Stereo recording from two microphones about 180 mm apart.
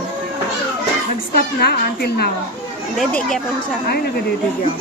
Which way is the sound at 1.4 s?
60° left (ahead or behind).